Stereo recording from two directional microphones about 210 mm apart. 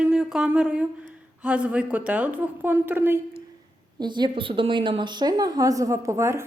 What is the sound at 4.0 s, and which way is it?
A woman's voice, 20° right (ahead or behind).